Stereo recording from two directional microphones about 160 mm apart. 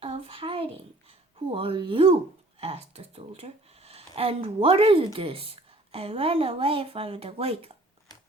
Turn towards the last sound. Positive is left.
turn(degrees=-40)  # may be behind; listen again after turning